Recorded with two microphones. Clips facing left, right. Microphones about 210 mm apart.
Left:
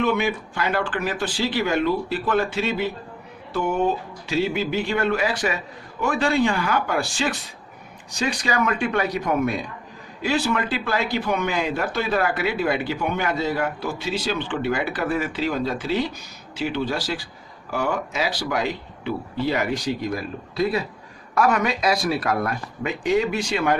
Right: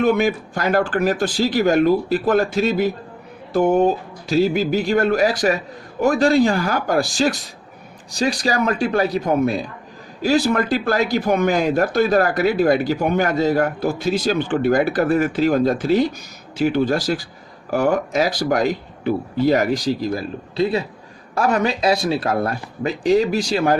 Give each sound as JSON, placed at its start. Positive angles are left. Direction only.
{"t": 0.0, "sound": "speech", "side_deg": -40}